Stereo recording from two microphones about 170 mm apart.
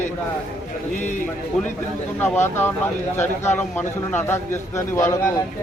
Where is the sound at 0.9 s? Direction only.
45° left (ahead or behind).